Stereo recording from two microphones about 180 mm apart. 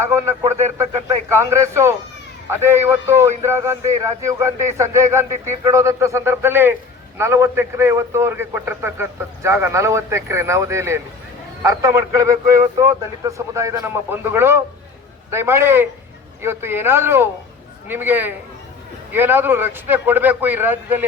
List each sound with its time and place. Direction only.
0.1 s a man's voice: 15° right (ahead or behind)